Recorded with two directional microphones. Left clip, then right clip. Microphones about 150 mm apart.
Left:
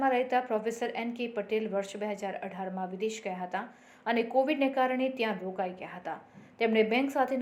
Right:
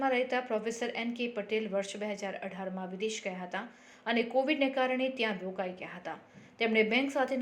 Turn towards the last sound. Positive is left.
turn(degrees=-35)  # may be behind; listen again after turning